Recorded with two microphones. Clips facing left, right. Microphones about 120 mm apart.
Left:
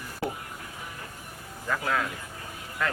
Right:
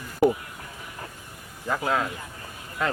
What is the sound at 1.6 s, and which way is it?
A man's voice, 25° right (ahead or behind).